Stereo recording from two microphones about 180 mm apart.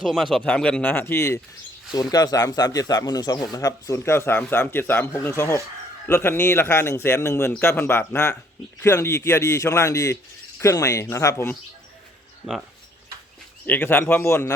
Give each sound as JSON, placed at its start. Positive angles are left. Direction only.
{"t": 0.0, "sound": "a man's voice", "side_deg": 0}
{"t": 13.7, "sound": "a man's voice", "side_deg": 10}